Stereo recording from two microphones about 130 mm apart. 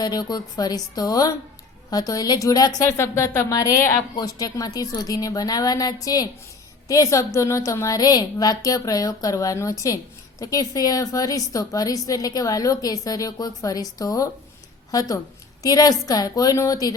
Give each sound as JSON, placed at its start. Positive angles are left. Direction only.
{"t": 0.0, "sound": "a woman's voice", "side_deg": 30}